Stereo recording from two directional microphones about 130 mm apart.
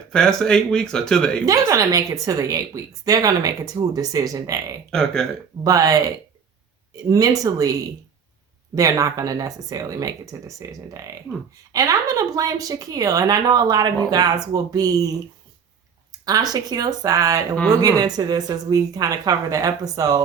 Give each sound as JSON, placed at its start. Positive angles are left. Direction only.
{"t": 0.1, "sound": "speech", "side_deg": 5}
{"t": 1.5, "sound": "a woman's voice", "side_deg": -25}
{"t": 4.9, "sound": "speech", "side_deg": 5}
{"t": 5.6, "sound": "a woman's voice", "side_deg": -25}
{"t": 16.2, "sound": "a woman's voice", "side_deg": -30}